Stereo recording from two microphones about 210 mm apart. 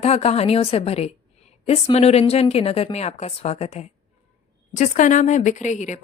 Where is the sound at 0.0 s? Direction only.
30° left (ahead or behind).